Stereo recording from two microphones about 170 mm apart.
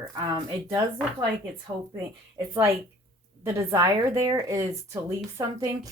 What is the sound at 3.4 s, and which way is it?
A woman's voice, 15° right (ahead or behind).